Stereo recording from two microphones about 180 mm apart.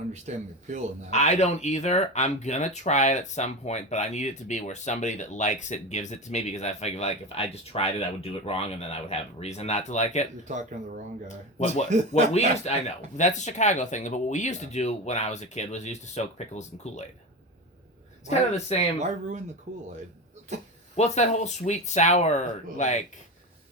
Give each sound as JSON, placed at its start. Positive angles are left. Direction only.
{"t": 0.1, "sound": "speech", "side_deg": -40}
{"t": 1.1, "sound": "speech", "side_deg": 40}
{"t": 10.5, "sound": "speech", "side_deg": -45}
{"t": 13.1, "sound": "speech", "side_deg": 40}
{"t": 18.3, "sound": "speech", "side_deg": 35}
{"t": 18.9, "sound": "speech", "side_deg": -40}
{"t": 20.9, "sound": "speech", "side_deg": 40}